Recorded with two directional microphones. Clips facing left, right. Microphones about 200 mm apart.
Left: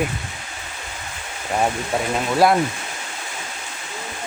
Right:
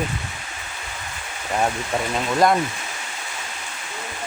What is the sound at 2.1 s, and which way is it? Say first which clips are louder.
Speech: left 2 dB; 5° left (ahead or behind).